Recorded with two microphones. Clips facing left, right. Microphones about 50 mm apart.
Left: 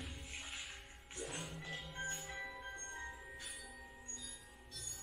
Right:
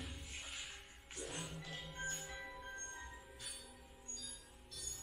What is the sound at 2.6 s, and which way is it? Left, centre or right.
Music, left.